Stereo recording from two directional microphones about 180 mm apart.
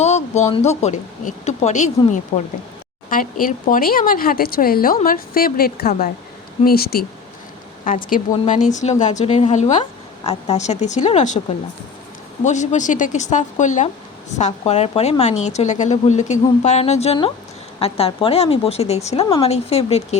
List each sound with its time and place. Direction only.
0.0 s a woman's voice: 40° left (ahead or behind)
12.5 s speech: 40° left (ahead or behind)